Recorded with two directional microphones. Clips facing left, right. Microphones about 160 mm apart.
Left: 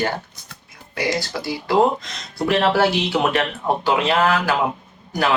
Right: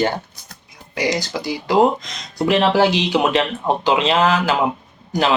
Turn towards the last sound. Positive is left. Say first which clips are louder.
# right 2 dB
turn(degrees=-20)  # may be behind; listen again after turning